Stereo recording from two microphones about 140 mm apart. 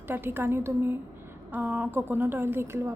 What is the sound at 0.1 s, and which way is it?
A woman's voice, 15° right (ahead or behind).